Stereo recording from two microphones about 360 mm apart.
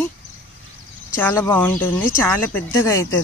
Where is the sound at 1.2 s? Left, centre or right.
Centre.